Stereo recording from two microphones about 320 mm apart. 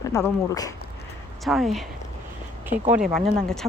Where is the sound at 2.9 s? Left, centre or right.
Centre.